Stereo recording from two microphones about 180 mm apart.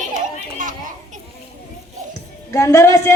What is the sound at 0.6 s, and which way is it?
Children playing, 45° right (ahead or behind).